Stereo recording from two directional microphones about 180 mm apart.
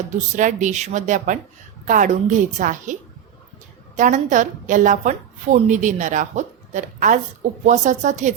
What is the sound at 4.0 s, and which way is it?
A woman's voice, 45° right (ahead or behind).